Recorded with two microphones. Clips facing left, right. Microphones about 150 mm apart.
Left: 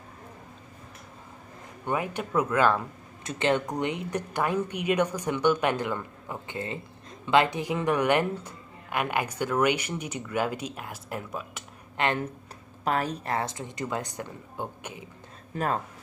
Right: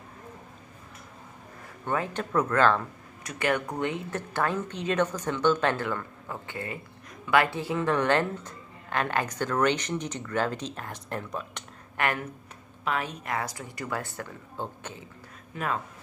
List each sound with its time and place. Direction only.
1.9 s speech: 15° left (ahead or behind)
3.3 s speech: 25° left (ahead or behind); by 11.6 s 5° left (ahead or behind)
12.0 s speech: 25° left (ahead or behind)
12.8 s speech: 40° left (ahead or behind); by 15.0 s 15° left (ahead or behind)
15.5 s speech: 40° left (ahead or behind)